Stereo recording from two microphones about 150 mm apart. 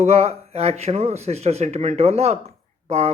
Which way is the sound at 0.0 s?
45° right (ahead or behind).